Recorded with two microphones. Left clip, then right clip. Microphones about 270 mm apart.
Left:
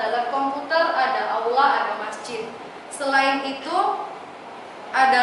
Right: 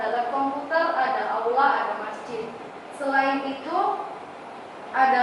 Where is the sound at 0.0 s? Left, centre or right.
Centre.